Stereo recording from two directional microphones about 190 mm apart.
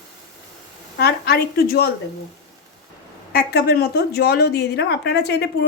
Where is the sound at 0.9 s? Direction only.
55° left (ahead or behind).